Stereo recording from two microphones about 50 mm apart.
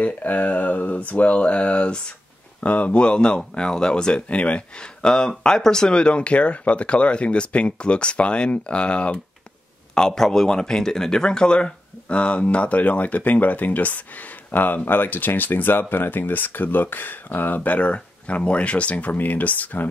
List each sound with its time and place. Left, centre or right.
0.0 s speech: left
9.9 s speech: centre; by 17.6 s left
17.6 s speech: left